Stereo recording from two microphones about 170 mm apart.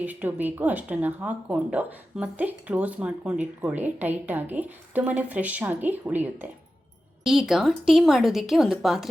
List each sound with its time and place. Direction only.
0.0 s speech: 10° right (ahead or behind)